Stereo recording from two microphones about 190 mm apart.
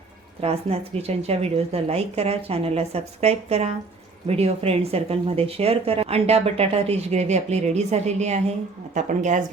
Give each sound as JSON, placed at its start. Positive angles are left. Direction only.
{"t": 0.4, "sound": "speech", "side_deg": -35}